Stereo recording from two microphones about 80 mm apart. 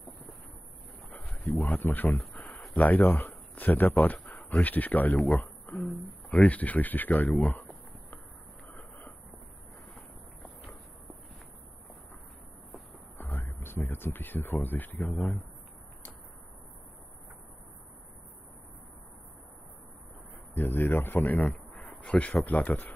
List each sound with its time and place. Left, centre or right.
1.2 s speech: centre
5.3 s insect: left
6.0 s speech: centre
13.2 s speech: left
20.5 s a man's voice: left